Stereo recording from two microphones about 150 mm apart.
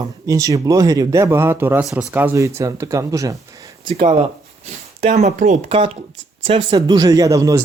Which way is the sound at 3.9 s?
40° right (ahead or behind).